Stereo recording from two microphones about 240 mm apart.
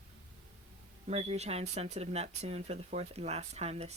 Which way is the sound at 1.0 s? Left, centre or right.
Right.